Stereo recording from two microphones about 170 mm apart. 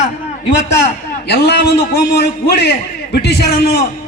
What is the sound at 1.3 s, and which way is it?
A man's voice, 70° left (ahead or behind).